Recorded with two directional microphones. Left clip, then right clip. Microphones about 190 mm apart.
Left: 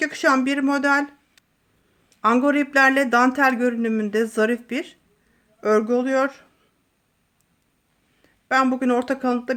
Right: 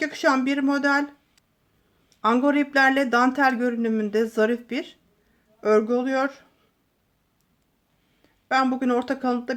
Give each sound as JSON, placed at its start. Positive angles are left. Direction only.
{"t": 0.0, "sound": "a man's voice", "side_deg": 15}
{"t": 2.0, "sound": "a man's voice", "side_deg": 15}
{"t": 8.2, "sound": "speech", "side_deg": 15}